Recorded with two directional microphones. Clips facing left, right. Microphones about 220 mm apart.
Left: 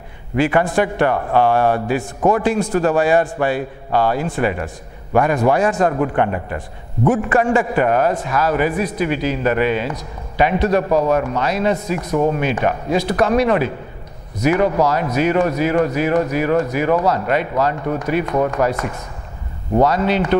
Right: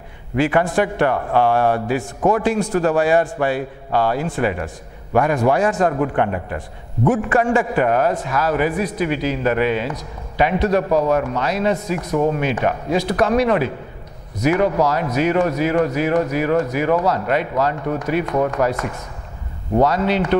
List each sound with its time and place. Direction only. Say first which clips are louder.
0.4 s a man's voice: left 1 dB; 15° left (ahead or behind)
12.1 s speech: left 1 dB; 25° left (ahead or behind)
12.4 s a man's voice: left 1 dB; 15° left (ahead or behind)